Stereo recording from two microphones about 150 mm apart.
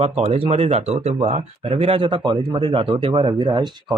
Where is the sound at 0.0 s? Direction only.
40° right (ahead or behind).